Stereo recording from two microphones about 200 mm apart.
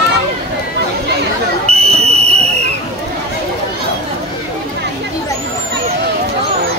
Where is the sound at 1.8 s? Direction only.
30° right (ahead or behind).